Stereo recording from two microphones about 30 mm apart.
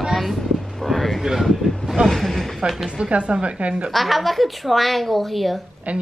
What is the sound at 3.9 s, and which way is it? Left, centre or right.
A woman's voice, centre.